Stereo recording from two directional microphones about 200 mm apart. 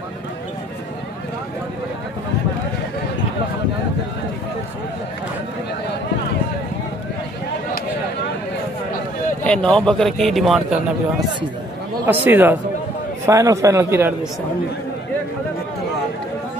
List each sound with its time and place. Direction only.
9.4 s a man's voice: 5° left (ahead or behind); by 14.1 s 10° right (ahead or behind)